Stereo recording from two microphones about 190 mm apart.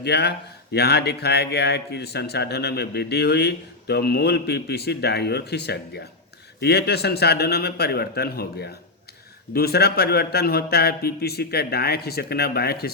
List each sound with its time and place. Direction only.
0.0 s speech: 60° left (ahead or behind)